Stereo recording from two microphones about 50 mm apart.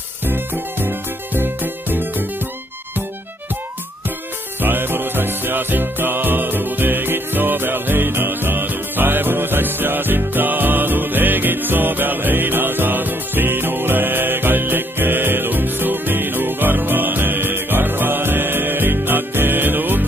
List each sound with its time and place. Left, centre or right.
0.2 s music: right
4.6 s music: right